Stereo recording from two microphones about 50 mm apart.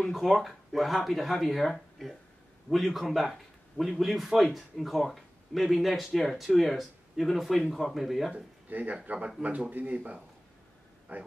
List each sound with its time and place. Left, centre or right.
0.1 s a man's voice: centre
8.6 s speech: right